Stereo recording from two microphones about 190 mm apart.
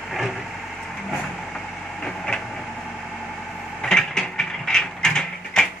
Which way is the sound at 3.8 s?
5° left (ahead or behind).